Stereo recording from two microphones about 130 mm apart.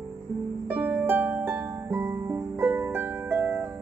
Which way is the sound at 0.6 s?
10° right (ahead or behind).